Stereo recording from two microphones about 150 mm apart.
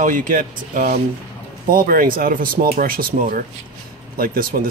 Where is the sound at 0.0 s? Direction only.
60° right (ahead or behind).